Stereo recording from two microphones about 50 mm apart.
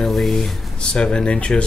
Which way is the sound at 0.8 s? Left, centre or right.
Centre.